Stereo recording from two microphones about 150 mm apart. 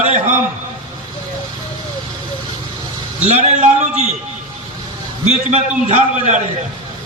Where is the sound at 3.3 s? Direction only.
50° right (ahead or behind).